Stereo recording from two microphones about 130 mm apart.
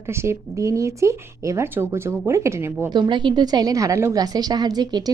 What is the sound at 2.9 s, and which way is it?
A woman's voice, 35° right (ahead or behind).